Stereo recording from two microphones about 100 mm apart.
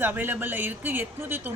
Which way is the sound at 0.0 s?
20° right (ahead or behind).